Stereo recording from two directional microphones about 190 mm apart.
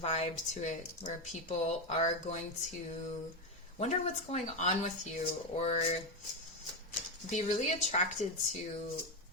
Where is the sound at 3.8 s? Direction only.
35° left (ahead or behind).